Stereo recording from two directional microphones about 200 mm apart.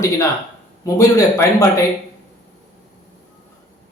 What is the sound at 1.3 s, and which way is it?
Speech, 10° left (ahead or behind).